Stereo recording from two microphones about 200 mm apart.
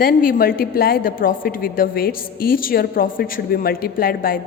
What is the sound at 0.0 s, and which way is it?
A woman's voice, 45° left (ahead or behind).